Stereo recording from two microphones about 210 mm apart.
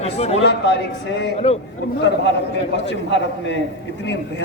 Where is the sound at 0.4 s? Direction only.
55° left (ahead or behind).